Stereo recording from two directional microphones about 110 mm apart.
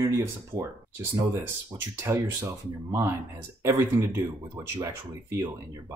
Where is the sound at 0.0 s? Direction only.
25° right (ahead or behind).